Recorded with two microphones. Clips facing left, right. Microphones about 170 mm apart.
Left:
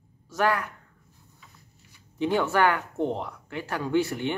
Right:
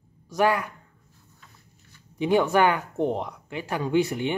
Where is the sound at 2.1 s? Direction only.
15° right (ahead or behind).